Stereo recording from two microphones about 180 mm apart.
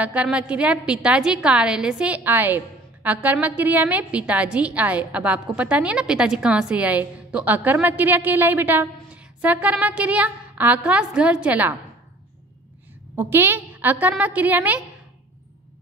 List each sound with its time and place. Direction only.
0.0 s a woman's voice: 10° right (ahead or behind)
13.1 s a woman's voice: 10° right (ahead or behind)